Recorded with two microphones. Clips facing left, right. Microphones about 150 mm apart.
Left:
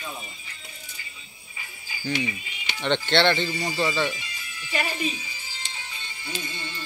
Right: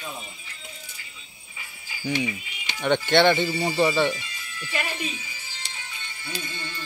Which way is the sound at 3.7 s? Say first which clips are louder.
Right 5 dB; 20° right (ahead or behind).